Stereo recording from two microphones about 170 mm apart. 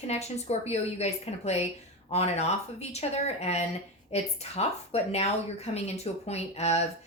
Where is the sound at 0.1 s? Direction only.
40° left (ahead or behind).